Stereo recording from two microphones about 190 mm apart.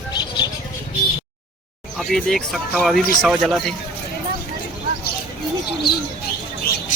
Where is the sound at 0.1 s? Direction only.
25° left (ahead or behind).